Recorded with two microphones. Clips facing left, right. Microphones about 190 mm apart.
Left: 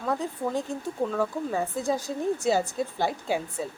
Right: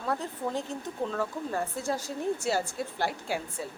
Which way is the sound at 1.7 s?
15° left (ahead or behind).